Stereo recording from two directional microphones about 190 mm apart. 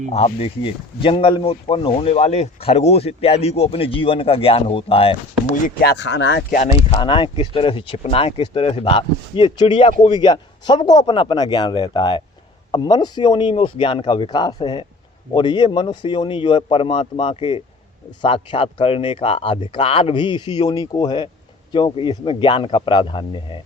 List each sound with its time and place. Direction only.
0.1 s speech: 30° left (ahead or behind)
5.6 s speech: 55° left (ahead or behind)
6.9 s speech: 25° left (ahead or behind)